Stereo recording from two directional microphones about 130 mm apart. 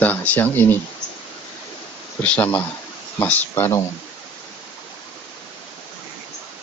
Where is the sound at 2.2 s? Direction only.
10° left (ahead or behind).